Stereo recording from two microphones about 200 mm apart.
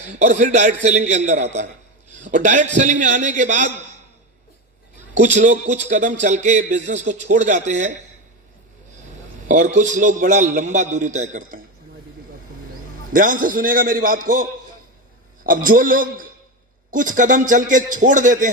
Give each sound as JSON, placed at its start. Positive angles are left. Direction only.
{"t": 0.1, "sound": "a man's voice", "side_deg": -40}
{"t": 5.2, "sound": "a man's voice", "side_deg": -40}
{"t": 9.5, "sound": "a man's voice", "side_deg": -40}
{"t": 13.1, "sound": "a man's voice", "side_deg": -45}
{"t": 15.4, "sound": "a man's voice", "side_deg": -45}